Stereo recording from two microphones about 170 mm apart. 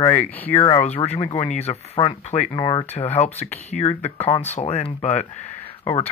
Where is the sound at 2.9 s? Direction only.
40° left (ahead or behind).